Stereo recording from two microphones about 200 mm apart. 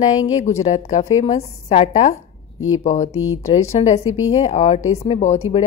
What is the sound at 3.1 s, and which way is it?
Speech, 90° left.